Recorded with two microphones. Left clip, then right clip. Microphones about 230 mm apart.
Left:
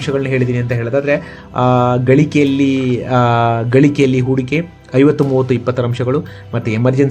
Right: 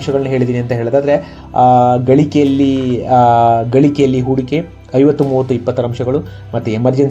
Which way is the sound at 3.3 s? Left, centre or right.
Left.